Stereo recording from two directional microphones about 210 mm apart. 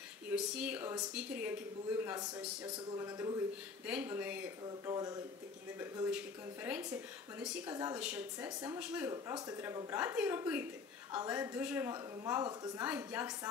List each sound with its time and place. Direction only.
0.3 s speech: 5° right (ahead or behind)
4.6 s speech: 15° right (ahead or behind)
6.8 s speech: 15° right (ahead or behind)
9.5 s speech: 15° right (ahead or behind)